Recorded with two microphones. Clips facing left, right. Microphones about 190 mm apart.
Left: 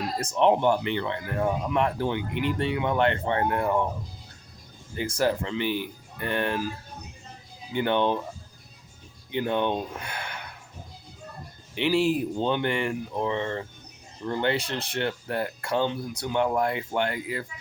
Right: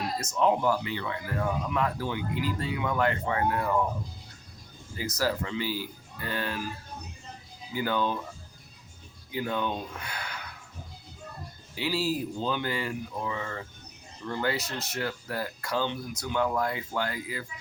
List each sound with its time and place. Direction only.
0.2 s speech: 30° left (ahead or behind)
4.9 s speech: 25° left (ahead or behind)
7.7 s speech: 25° left (ahead or behind)
9.3 s speech: 25° left (ahead or behind)
11.7 s speech: 25° left (ahead or behind)